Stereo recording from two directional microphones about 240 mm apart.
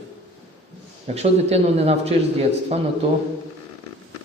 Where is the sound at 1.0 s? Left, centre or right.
Right.